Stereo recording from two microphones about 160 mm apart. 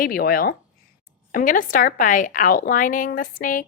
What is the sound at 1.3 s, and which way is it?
A woman's voice, 60° left (ahead or behind).